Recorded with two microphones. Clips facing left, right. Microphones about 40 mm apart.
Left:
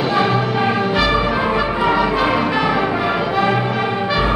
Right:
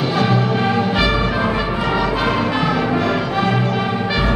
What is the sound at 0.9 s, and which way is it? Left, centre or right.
Brass instrument, centre.